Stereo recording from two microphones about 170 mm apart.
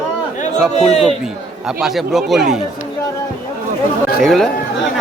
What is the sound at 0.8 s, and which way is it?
Speech, 40° left (ahead or behind).